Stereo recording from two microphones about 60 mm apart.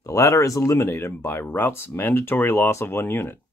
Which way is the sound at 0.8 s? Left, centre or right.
Left.